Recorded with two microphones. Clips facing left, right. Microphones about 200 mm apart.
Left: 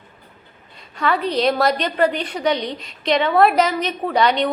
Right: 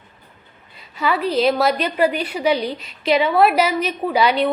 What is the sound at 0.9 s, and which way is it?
A woman's voice, 5° right (ahead or behind).